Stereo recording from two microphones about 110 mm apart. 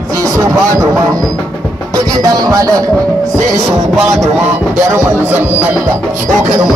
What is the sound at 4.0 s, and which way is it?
Music, 5° right (ahead or behind).